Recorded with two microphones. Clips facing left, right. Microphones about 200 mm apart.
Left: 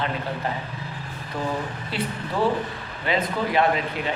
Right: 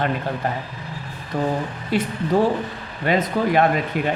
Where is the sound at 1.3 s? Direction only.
55° right (ahead or behind).